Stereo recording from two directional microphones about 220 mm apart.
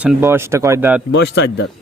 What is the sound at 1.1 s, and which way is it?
Speech, 50° left (ahead or behind).